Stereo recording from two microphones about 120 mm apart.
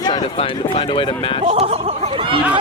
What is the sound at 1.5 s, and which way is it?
Speech, 60° right (ahead or behind).